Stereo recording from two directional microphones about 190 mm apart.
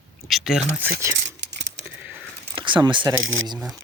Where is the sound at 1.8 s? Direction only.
10° right (ahead or behind).